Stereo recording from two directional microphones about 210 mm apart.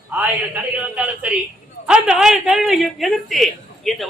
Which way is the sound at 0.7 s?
5° right (ahead or behind).